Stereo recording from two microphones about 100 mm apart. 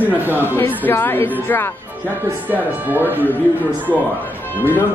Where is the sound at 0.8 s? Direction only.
20° left (ahead or behind).